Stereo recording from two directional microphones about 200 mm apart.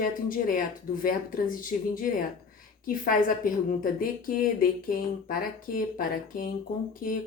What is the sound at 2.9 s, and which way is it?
A woman's voice, 45° left (ahead or behind).